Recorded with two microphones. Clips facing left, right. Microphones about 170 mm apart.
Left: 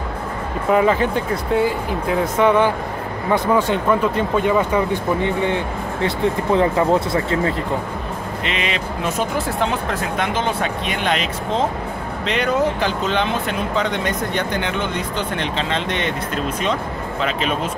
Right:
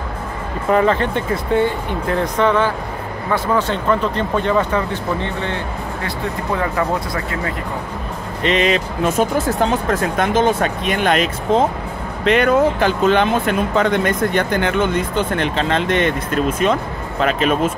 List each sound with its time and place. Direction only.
0.7 s speech: 5° left (ahead or behind); by 7.5 s 25° left (ahead or behind)
8.5 s speech: 40° right (ahead or behind)
12.3 s speech: 55° right (ahead or behind)